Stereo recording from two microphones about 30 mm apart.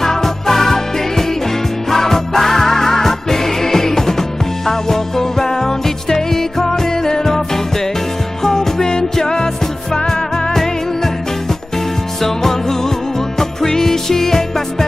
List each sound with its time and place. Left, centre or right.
0.0 s music: centre
12.2 s music: centre